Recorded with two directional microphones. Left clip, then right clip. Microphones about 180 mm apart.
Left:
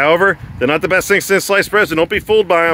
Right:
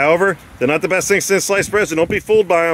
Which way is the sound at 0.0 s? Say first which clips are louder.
Left 2 dB; 5° right (ahead or behind).